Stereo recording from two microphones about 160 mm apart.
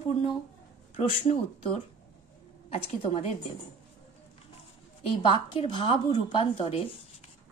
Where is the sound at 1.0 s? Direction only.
35° left (ahead or behind).